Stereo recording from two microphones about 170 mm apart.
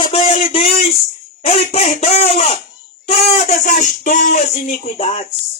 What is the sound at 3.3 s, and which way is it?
Speech, 45° left (ahead or behind).